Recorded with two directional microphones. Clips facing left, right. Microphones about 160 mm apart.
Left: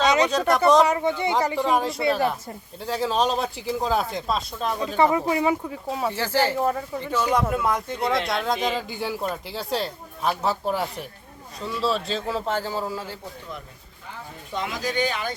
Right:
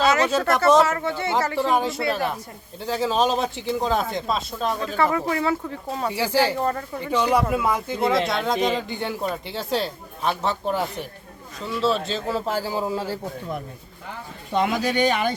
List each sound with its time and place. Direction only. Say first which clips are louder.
0.0 s a sound: even; 20° left (ahead or behind)
0.3 s speech: even; centre (ahead or behind)
0.8 s speech: left 1 dB; 15° left (ahead or behind)
1.6 s speech: even; centre (ahead or behind)
5.1 s speech: left 1 dB; 20° left (ahead or behind)
6.1 s speech: right 2 dB; 10° right (ahead or behind)
6.6 s speech: left 1 dB; 5° left (ahead or behind)
7.4 s speech: right 1 dB; 5° right (ahead or behind)
14.5 s speech: right 6 dB; 65° right (ahead or behind)